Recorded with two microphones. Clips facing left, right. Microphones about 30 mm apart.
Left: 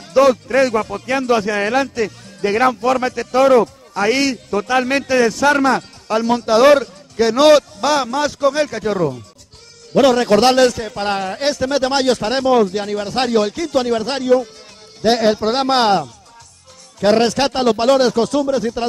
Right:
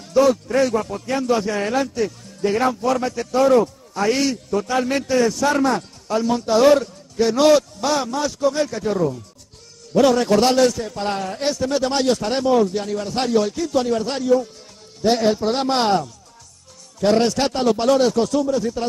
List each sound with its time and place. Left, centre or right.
0.0 s speech: left